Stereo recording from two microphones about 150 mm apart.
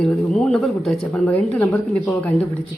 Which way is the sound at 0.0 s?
5° left (ahead or behind).